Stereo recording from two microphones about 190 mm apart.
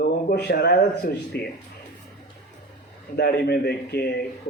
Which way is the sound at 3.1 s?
60° left (ahead or behind).